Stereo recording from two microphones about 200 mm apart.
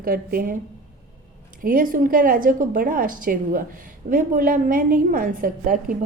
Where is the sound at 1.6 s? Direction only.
45° right (ahead or behind).